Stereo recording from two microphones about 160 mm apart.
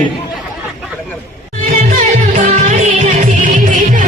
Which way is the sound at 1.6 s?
55° right (ahead or behind).